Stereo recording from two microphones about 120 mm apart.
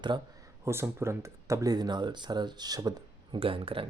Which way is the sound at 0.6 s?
20° right (ahead or behind).